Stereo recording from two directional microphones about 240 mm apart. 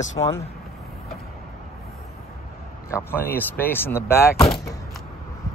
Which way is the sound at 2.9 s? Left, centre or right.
Centre.